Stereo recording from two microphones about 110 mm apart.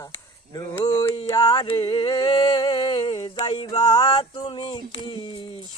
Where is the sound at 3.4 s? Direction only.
55° left (ahead or behind).